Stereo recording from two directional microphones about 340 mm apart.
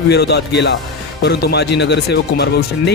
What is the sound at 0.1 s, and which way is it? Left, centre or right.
Speech, left.